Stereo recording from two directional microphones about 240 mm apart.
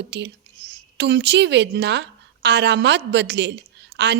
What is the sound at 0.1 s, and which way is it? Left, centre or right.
A woman's voice, right.